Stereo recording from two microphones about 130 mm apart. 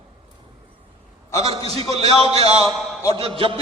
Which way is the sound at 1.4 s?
50° right (ahead or behind).